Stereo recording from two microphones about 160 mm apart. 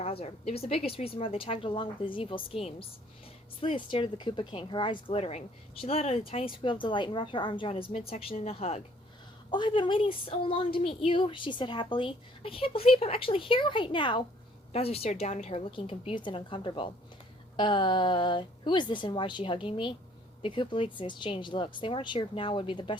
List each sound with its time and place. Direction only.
0.0 s a woman's voice: 40° left (ahead or behind)
9.5 s a woman's voice: 30° left (ahead or behind)